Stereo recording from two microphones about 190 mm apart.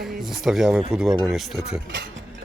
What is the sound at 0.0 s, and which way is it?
Speech, centre (ahead or behind).